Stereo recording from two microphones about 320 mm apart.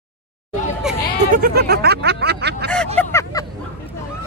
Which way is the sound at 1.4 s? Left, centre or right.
Right.